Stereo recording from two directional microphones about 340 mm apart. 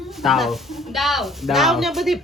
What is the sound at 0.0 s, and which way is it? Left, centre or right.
Speech, centre.